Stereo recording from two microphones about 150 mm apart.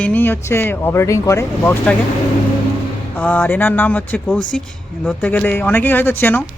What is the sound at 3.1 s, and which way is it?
Speech, 10° left (ahead or behind).